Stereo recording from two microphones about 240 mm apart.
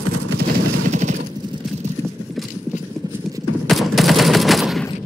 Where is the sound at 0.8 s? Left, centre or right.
Right.